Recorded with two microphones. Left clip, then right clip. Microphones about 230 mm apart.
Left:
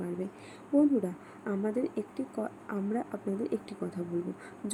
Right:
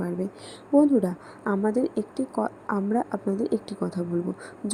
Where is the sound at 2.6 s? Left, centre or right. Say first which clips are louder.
Right 8 dB; centre.